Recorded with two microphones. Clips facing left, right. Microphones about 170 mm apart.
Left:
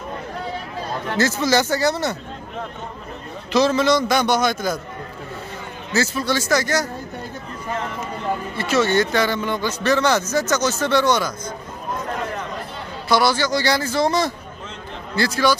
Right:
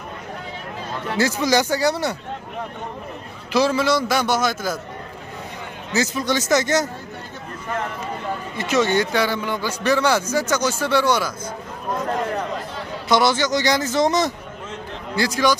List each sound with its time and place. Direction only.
1.1 s a man's voice: 15° right (ahead or behind)
3.5 s a man's voice: 10° right (ahead or behind)
5.9 s speech: 20° right (ahead or behind)
8.5 s a man's voice: 15° right (ahead or behind)
13.1 s a man's voice: 20° right (ahead or behind)